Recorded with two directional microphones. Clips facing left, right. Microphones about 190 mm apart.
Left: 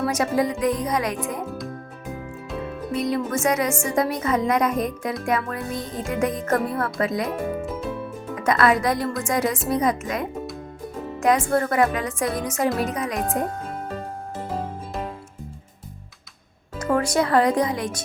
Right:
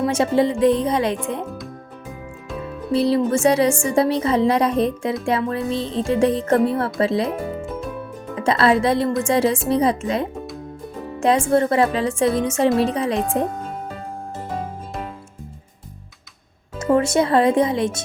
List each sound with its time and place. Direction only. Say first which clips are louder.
0.0 s speech: right 4 dB; 25° right (ahead or behind)
2.9 s speech: right 7 dB; 30° right (ahead or behind)
7.6 s music: right 1 dB; centre (ahead or behind)
8.4 s speech: right 3 dB; 30° right (ahead or behind)
16.7 s speech: right 4 dB; 25° right (ahead or behind)